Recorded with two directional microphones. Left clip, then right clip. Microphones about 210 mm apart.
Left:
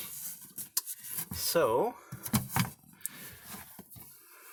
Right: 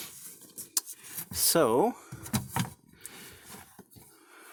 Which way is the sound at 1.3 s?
60° right (ahead or behind).